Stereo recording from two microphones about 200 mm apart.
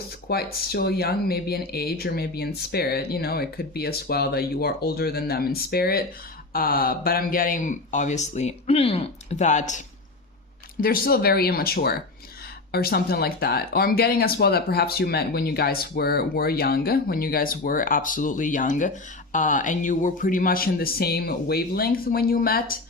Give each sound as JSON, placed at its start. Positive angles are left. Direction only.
{"t": 0.3, "sound": "speech", "side_deg": 50}